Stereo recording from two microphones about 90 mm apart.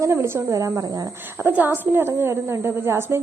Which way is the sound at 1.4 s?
20° right (ahead or behind).